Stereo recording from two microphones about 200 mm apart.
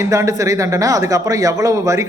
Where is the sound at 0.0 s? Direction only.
15° right (ahead or behind).